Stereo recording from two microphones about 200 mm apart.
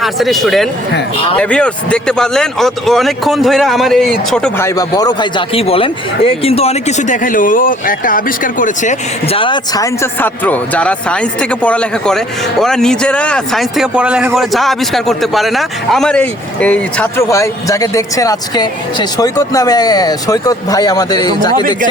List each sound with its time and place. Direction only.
0.0 s speech: centre (ahead or behind)
4.6 s speech: 15° left (ahead or behind)